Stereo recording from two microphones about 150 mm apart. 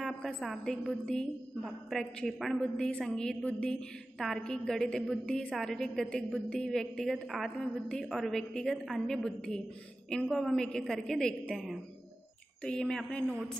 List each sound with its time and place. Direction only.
0.0 s a woman's voice: centre (ahead or behind)